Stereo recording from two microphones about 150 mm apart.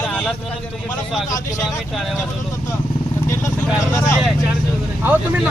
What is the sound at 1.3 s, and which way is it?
Speech, 55° left (ahead or behind).